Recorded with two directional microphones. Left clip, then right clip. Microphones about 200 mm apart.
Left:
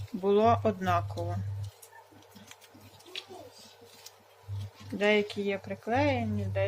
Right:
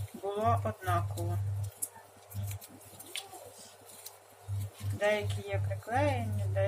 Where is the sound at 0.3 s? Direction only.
50° left (ahead or behind).